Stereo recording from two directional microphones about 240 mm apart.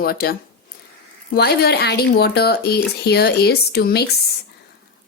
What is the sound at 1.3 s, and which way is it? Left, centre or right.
Speech, left.